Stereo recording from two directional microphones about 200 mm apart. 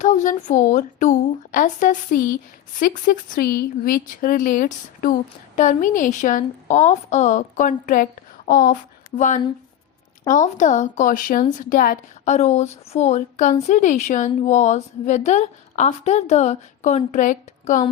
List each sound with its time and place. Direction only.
0.0 s speech: 40° left (ahead or behind)